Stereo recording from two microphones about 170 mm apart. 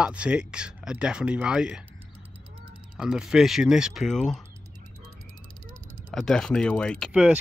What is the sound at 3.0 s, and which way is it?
Speech, 5° right (ahead or behind).